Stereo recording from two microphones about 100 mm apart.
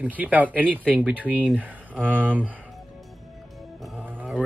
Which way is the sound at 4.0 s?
20° right (ahead or behind).